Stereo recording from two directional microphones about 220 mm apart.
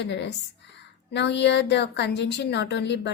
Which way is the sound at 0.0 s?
50° left (ahead or behind).